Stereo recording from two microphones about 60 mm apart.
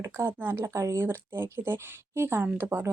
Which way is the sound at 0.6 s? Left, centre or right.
Right.